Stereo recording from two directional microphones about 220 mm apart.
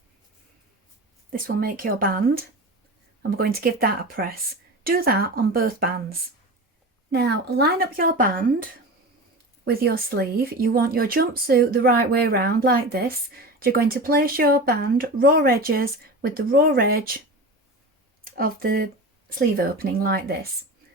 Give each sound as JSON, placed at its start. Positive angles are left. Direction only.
{"t": 1.3, "sound": "a woman's voice", "side_deg": -40}
{"t": 9.6, "sound": "speech", "side_deg": -45}
{"t": 18.3, "sound": "speech", "side_deg": -40}